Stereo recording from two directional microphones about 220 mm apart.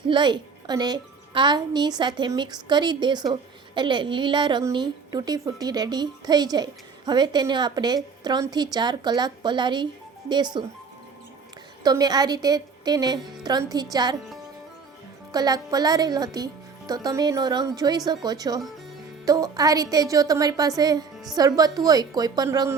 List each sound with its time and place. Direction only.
0.1 s a woman's voice: 20° right (ahead or behind)
11.8 s a woman's voice: 15° right (ahead or behind)
15.3 s speech: 15° right (ahead or behind)